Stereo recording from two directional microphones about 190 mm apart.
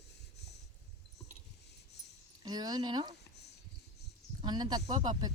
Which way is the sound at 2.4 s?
20° right (ahead or behind).